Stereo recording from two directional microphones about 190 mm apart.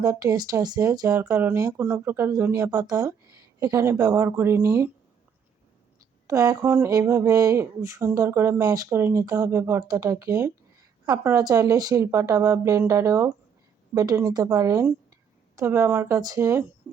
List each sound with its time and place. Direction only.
0.0 s speech: 20° right (ahead or behind)
6.2 s speech: 20° right (ahead or behind)
16.9 s a sound: 10° right (ahead or behind)